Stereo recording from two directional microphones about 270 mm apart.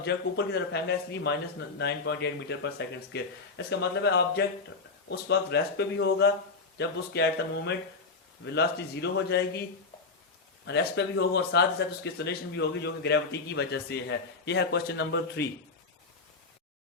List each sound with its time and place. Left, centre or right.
0.0 s a man's voice: left
10.7 s a man's voice: left